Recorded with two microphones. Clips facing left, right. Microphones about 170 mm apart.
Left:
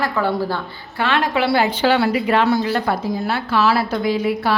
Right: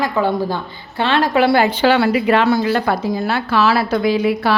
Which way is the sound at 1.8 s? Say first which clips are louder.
Right 2 dB; 85° right.